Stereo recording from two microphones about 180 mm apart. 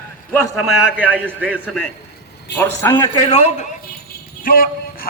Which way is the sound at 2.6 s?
15° left (ahead or behind).